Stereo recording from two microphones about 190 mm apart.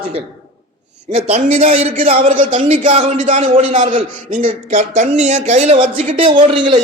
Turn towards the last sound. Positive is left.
turn(degrees=-25)  # may be behind; listen again after turning